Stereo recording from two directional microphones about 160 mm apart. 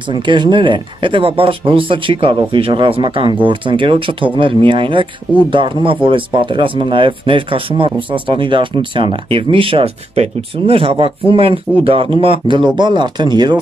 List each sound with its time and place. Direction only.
0.1 s speech: 30° right (ahead or behind)